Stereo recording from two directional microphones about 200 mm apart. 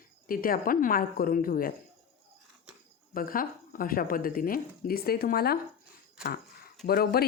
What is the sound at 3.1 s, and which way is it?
Speech, 45° left (ahead or behind).